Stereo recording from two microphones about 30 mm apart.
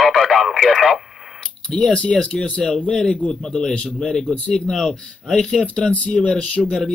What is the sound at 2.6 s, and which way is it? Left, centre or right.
A man's voice, centre.